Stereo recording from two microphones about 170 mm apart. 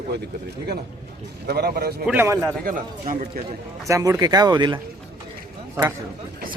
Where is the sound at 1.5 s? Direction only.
65° right (ahead or behind).